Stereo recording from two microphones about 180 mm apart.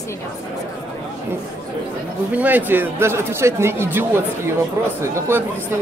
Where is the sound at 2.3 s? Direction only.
10° right (ahead or behind).